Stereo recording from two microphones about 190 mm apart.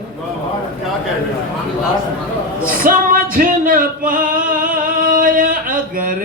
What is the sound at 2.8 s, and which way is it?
Male singing, 45° right (ahead or behind).